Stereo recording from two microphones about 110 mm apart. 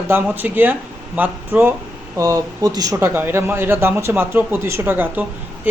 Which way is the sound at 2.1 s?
30° right (ahead or behind).